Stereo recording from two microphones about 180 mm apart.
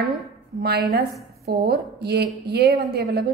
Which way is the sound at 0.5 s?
65° right (ahead or behind).